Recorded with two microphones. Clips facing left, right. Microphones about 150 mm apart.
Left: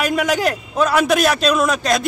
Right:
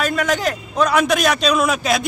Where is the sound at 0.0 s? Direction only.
10° left (ahead or behind).